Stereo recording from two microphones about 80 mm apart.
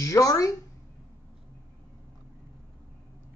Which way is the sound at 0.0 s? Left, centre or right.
Left.